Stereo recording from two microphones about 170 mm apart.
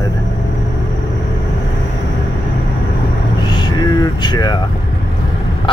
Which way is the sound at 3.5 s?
25° left (ahead or behind).